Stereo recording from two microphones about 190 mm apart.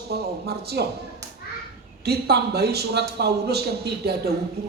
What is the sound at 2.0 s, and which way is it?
Speech, 60° right (ahead or behind).